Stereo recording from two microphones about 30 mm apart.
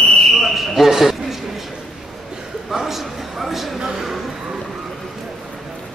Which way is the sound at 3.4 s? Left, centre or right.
Centre.